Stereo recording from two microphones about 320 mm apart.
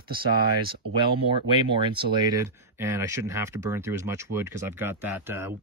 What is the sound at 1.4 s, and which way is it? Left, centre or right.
Speech, centre.